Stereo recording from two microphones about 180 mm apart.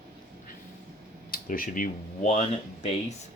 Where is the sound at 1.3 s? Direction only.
50° left (ahead or behind).